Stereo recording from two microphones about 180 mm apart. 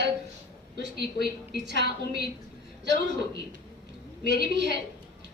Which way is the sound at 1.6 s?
70° right (ahead or behind).